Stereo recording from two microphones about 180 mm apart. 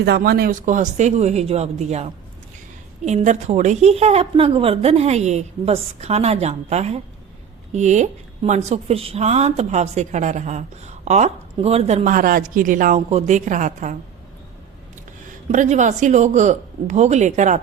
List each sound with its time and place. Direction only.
0.0 s speech: 60° right (ahead or behind); by 13.9 s 45° right (ahead or behind)
15.5 s speech: 45° right (ahead or behind)